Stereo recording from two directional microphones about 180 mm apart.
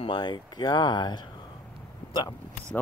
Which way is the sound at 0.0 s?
25° left (ahead or behind).